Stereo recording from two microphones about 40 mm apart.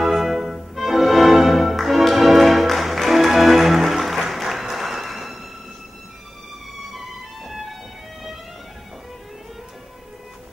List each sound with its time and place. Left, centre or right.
0.0 s music: centre
6.9 s music: centre